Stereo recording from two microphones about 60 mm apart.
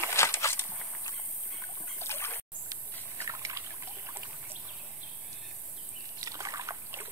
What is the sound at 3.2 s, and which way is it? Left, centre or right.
Trickle, right.